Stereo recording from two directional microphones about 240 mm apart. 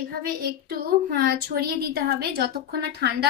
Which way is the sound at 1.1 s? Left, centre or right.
Right.